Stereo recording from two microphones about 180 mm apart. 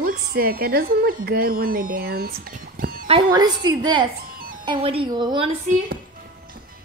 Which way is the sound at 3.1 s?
25° right (ahead or behind).